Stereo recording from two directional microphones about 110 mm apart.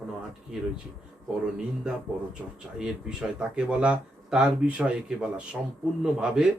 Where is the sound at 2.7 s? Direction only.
5° right (ahead or behind).